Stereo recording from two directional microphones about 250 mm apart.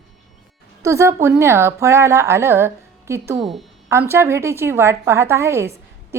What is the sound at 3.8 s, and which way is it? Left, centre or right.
A woman's voice, centre.